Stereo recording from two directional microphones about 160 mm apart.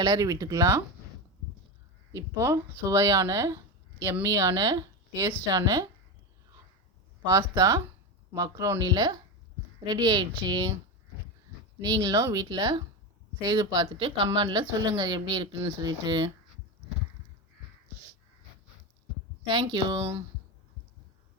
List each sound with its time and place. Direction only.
0.0 s speech: 25° right (ahead or behind)
2.1 s speech: 15° right (ahead or behind)
7.3 s speech: 25° right (ahead or behind)
11.8 s speech: 25° right (ahead or behind)
19.5 s speech: 30° right (ahead or behind)